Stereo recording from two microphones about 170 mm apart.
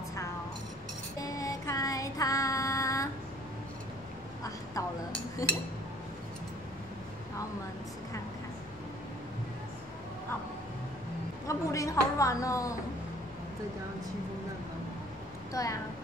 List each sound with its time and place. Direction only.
1.2 s female singing: 20° left (ahead or behind)
11.4 s a sound: 20° left (ahead or behind)
15.5 s speech: 20° left (ahead or behind)